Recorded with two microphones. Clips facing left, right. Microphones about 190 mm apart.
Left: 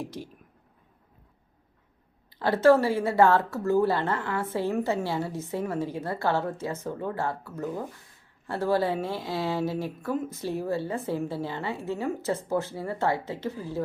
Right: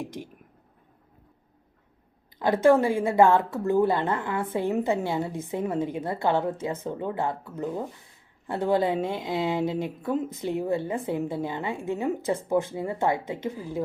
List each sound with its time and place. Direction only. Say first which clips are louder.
0.0 s speech: right 1 dB; 15° right (ahead or behind)
2.4 s a woman's voice: even; 15° right (ahead or behind)